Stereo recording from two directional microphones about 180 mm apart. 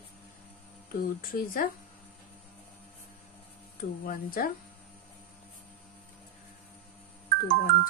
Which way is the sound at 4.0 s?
50° left (ahead or behind).